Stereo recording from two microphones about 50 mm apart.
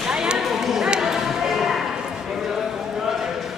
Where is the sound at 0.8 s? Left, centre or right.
Centre.